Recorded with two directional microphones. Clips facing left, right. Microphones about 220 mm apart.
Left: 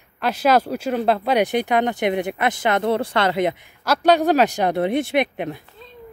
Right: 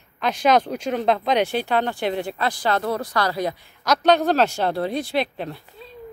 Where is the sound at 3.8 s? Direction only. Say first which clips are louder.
Left 1 dB; 10° left (ahead or behind).